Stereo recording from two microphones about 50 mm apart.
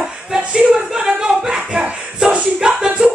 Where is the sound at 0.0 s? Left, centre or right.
Centre.